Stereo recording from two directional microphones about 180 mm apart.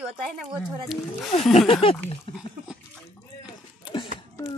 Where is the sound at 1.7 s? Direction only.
30° left (ahead or behind).